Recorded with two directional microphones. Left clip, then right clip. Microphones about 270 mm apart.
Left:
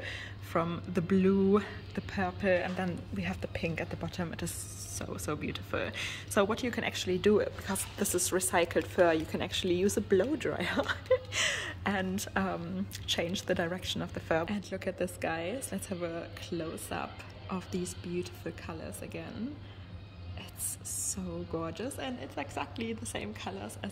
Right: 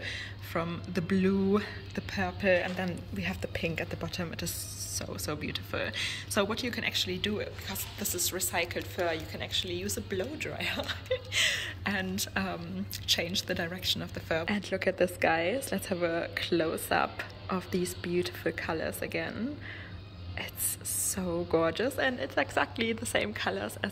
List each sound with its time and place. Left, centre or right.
0.0 s speech: centre
14.4 s a woman's voice: centre
21.0 s a woman's voice: centre